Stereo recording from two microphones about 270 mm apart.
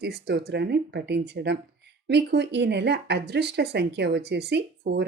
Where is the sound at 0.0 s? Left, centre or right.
Right.